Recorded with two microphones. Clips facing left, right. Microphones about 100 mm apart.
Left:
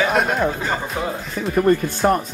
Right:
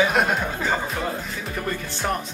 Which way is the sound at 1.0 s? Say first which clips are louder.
Left 3 dB; 15° left (ahead or behind).